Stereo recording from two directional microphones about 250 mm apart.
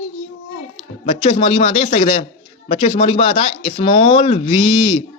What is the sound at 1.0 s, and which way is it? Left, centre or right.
A man's voice, left.